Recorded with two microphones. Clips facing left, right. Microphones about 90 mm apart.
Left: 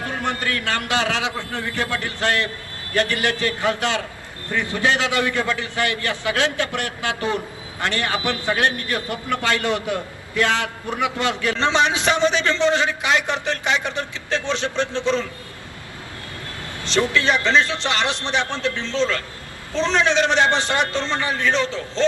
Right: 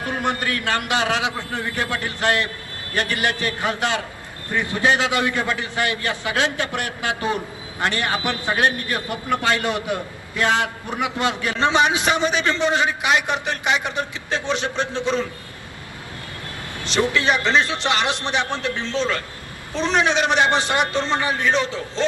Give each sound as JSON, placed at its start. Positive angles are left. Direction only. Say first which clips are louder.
{"t": 0.0, "sound": "a man's voice", "louder": "right 1 dB", "side_deg": -20}
{"t": 16.8, "sound": "a man's voice", "louder": "even", "side_deg": -20}